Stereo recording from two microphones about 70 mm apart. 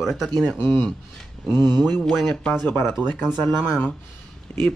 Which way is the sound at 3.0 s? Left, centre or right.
Left.